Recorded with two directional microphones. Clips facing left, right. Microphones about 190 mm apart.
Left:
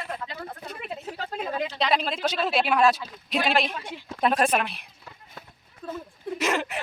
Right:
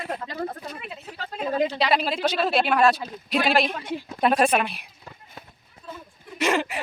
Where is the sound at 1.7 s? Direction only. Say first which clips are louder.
Right 2 dB; 5° right (ahead or behind).